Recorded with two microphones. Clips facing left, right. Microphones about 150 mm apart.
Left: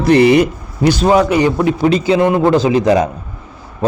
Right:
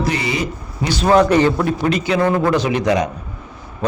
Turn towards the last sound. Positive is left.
turn(degrees=30)  # may be behind; listen again after turning